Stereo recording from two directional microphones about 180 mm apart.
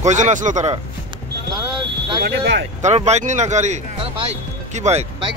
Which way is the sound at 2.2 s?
80° right.